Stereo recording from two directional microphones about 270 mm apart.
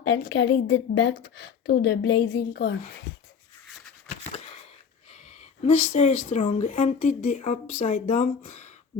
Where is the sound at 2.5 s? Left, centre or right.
Left.